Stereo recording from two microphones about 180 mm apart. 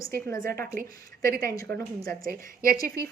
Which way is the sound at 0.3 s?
50° right (ahead or behind).